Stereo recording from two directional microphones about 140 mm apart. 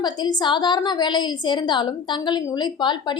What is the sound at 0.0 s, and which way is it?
A woman's voice, 30° left (ahead or behind).